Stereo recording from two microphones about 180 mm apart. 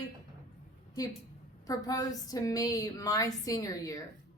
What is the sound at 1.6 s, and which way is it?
Speech, 20° left (ahead or behind).